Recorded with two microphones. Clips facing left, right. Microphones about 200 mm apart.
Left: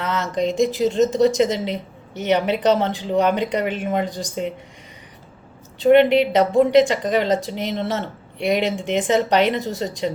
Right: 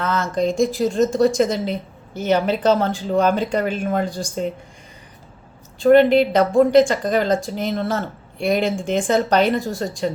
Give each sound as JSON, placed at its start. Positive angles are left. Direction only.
{"t": 0.0, "sound": "a woman's voice", "side_deg": 20}
{"t": 6.3, "sound": "speech", "side_deg": 20}